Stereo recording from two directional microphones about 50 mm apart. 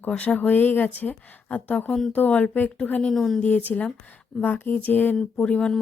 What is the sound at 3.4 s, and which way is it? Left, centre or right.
Speech, left.